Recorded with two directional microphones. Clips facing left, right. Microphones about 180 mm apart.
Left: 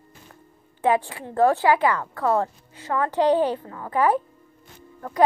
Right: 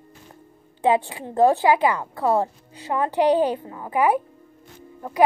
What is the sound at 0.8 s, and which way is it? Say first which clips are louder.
A woman's voice: right 1 dB; 15° right (ahead or behind).